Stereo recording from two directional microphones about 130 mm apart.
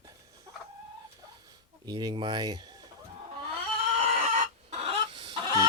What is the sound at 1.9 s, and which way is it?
Speech, 35° right (ahead or behind).